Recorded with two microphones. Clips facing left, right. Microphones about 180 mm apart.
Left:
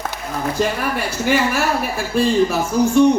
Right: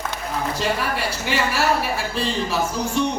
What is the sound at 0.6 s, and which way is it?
A woman's voice, 50° left (ahead or behind).